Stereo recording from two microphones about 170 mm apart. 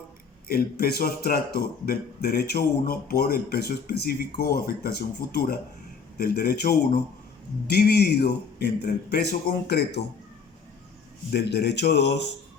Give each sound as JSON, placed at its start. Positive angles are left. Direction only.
{"t": 0.4, "sound": "a man's voice", "side_deg": 65}
{"t": 11.3, "sound": "speech", "side_deg": 80}